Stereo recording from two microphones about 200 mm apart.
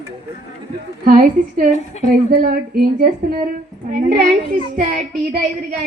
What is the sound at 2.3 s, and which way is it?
Speech, 50° right (ahead or behind).